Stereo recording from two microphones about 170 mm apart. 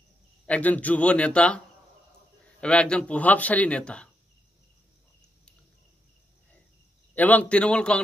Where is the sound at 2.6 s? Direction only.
5° left (ahead or behind).